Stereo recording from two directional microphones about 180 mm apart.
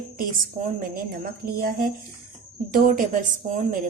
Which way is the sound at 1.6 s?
55° right (ahead or behind).